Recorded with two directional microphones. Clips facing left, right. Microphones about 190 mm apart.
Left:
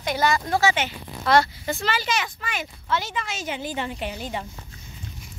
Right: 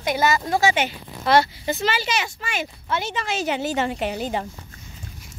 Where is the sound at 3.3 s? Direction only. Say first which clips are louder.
Right 9 dB; 75° right (ahead or behind).